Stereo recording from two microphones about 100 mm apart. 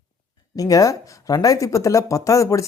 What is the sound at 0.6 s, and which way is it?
Speech, 35° left (ahead or behind).